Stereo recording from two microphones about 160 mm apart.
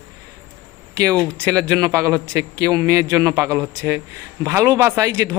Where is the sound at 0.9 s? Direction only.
20° right (ahead or behind).